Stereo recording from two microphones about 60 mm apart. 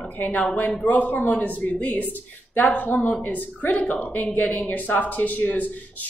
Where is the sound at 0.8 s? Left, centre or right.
Left.